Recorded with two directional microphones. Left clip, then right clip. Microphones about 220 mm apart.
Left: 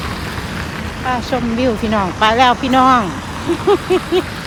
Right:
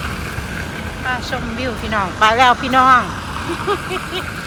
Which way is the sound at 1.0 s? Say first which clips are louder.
Left 4 dB; 25° left (ahead or behind).